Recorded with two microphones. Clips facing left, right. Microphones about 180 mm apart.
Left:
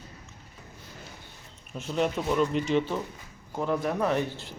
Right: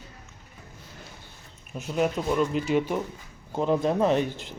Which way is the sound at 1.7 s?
5° right (ahead or behind).